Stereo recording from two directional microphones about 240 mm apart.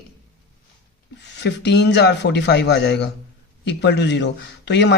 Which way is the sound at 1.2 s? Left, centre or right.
Left.